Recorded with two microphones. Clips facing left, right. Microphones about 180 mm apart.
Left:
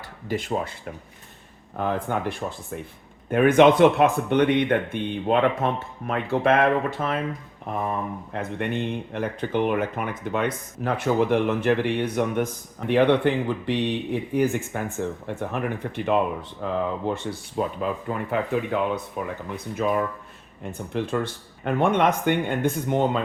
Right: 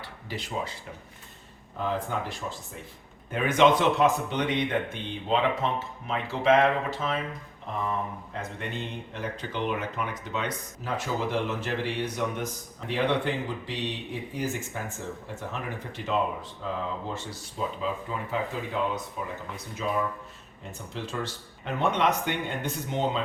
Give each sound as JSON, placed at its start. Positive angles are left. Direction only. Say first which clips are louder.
{"t": 0.3, "sound": "speech", "louder": "left 7 dB", "side_deg": 50}